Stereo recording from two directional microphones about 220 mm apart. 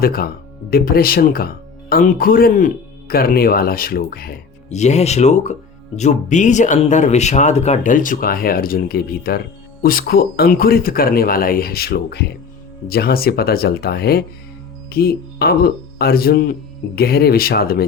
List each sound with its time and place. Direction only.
0.0 s speech: 45° left (ahead or behind)
4.7 s speech: 30° left (ahead or behind)